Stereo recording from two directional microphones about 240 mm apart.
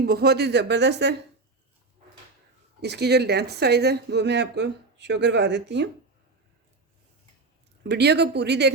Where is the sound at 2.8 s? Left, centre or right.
Right.